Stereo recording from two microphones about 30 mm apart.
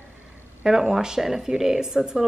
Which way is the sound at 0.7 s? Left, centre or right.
Centre.